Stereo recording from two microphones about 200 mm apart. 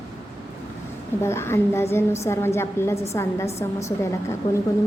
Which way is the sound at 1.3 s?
10° left (ahead or behind).